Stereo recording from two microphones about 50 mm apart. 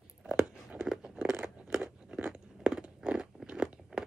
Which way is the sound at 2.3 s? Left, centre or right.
Centre.